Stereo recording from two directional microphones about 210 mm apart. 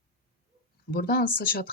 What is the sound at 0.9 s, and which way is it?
Speech, 45° left (ahead or behind).